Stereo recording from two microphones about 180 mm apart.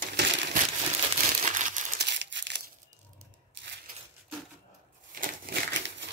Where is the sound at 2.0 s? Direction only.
75° right (ahead or behind).